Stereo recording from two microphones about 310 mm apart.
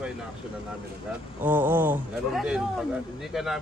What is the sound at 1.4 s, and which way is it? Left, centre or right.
A man's voice, centre.